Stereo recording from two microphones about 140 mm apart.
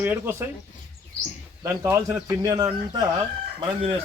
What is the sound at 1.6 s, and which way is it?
Speech, 20° right (ahead or behind).